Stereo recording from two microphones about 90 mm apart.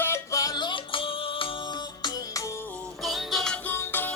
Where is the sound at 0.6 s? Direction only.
65° left (ahead or behind); by 2.5 s 45° left (ahead or behind).